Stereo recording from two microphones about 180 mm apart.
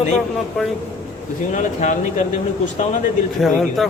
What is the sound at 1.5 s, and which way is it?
Speech, 45° left (ahead or behind).